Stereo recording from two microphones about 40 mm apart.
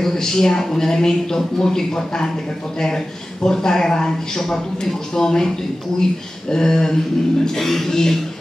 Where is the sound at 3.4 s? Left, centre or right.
Centre.